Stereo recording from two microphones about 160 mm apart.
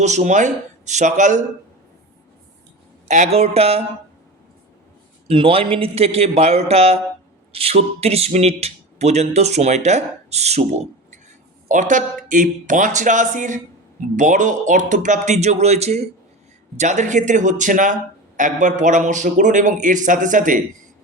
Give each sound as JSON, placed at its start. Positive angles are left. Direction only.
{"t": 0.0, "sound": "speech", "side_deg": -45}
{"t": 3.1, "sound": "a man's voice", "side_deg": -45}
{"t": 5.3, "sound": "a man's voice", "side_deg": -35}